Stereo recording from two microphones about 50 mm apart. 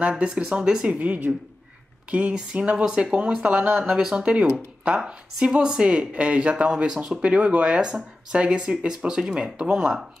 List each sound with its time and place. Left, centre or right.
0.2 s speech: centre
0.9 s speech: right; by 4.3 s centre
4.3 s speech: right